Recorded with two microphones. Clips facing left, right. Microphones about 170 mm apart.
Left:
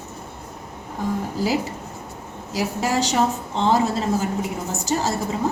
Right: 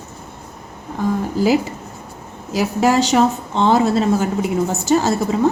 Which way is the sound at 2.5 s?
70° right (ahead or behind).